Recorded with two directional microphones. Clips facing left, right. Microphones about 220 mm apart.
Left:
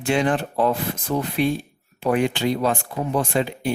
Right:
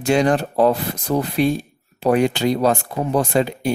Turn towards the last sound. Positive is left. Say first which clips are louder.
# right 4 dB
turn(degrees=-40)  # may be behind; listen again after turning